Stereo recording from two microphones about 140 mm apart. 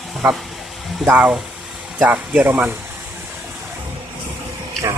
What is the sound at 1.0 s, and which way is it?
Speech, 10° right (ahead or behind).